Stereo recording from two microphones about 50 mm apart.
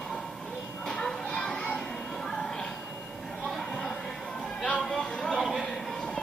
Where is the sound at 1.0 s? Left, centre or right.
Centre.